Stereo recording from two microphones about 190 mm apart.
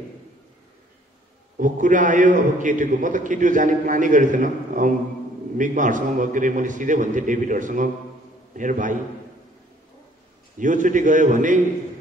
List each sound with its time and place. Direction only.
1.6 s a man's voice: 45° right (ahead or behind)
10.6 s a man's voice: 40° right (ahead or behind)